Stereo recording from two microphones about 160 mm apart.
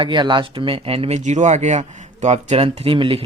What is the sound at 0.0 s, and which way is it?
Speech, 30° right (ahead or behind).